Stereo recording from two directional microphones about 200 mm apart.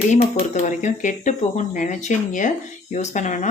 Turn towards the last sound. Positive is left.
turn(degrees=35)  # may be behind; listen again after turning